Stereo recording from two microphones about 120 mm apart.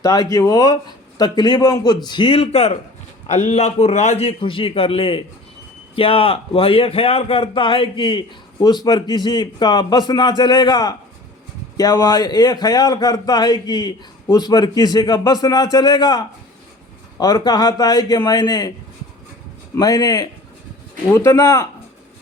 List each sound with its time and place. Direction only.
0.0 s a man's voice: 30° left (ahead or behind); by 2.7 s 60° left (ahead or behind)
3.2 s a man's voice: 75° left (ahead or behind); by 18.7 s 35° left (ahead or behind)
19.8 s speech: 30° left (ahead or behind)